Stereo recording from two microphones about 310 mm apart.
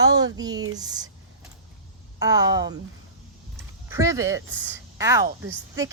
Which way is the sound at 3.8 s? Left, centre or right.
Centre.